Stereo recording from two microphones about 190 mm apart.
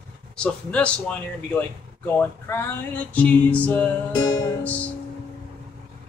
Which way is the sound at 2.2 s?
10° left (ahead or behind).